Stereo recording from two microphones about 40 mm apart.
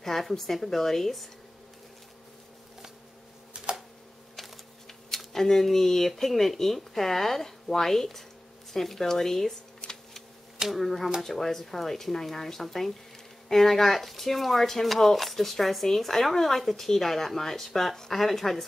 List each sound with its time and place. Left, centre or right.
0.0 s speech: centre
3.6 s a sound: right
4.4 s speech: centre
10.6 s speech: centre